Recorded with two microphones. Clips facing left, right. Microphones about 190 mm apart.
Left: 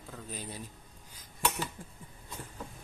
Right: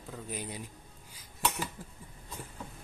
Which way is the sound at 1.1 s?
10° right (ahead or behind).